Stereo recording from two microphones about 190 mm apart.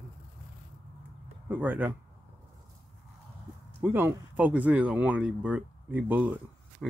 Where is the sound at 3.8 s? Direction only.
10° right (ahead or behind).